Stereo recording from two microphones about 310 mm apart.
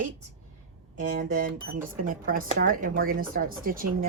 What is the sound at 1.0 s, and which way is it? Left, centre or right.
A woman's voice, right.